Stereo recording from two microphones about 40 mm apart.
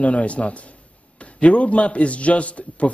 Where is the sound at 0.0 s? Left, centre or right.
Left.